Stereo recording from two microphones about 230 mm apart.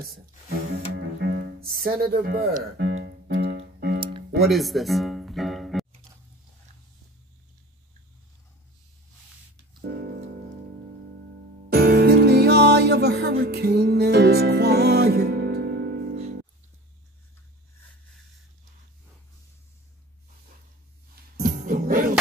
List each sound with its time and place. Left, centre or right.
0.9 s music: right
4.5 s music: centre
9.8 s music: right
11.7 s music: right
16.2 s music: right
21.1 s music: right